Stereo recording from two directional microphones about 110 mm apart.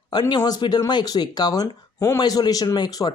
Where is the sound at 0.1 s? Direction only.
40° left (ahead or behind).